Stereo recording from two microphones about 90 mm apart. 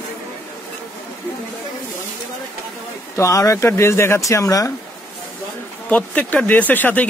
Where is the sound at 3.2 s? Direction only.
35° left (ahead or behind).